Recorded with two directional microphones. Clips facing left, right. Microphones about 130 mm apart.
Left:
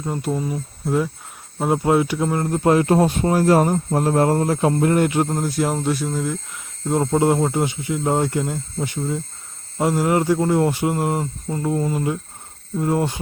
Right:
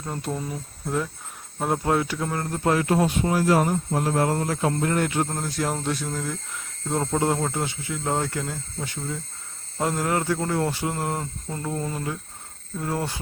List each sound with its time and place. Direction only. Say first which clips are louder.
0.0 s speech: left 6 dB; 5° left (ahead or behind)